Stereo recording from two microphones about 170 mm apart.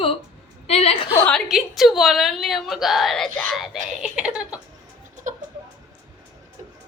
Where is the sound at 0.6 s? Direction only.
35° left (ahead or behind).